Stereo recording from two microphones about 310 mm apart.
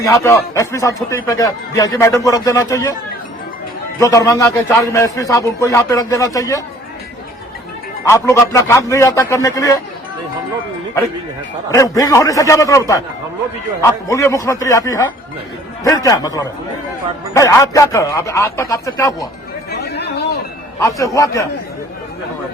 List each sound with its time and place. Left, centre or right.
0.2 s speech: centre
4.0 s speech: centre
8.0 s speech: centre
11.7 s speech: centre
14.1 s speech: centre
19.7 s chatter: left
20.7 s speech: centre